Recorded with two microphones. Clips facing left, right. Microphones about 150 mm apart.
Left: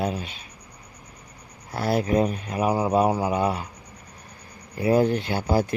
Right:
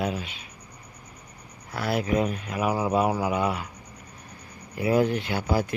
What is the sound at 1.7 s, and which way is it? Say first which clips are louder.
Speech: left 3 dB; 35° left (ahead or behind).